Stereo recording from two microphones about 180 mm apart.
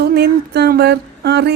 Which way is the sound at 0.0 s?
65° right (ahead or behind).